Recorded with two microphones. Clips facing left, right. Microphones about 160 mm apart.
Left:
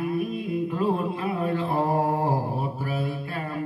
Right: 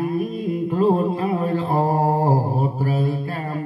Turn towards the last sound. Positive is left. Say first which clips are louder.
# right 7 dB
turn(degrees=-40)  # may be behind; listen again after turning